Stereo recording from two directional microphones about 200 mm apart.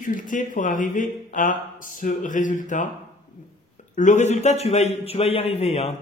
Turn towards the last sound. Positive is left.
turn(degrees=30)  # may be behind; listen again after turning